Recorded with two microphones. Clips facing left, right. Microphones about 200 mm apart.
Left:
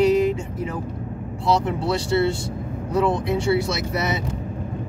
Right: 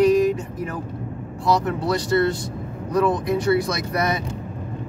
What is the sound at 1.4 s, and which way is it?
Speech, 25° left (ahead or behind).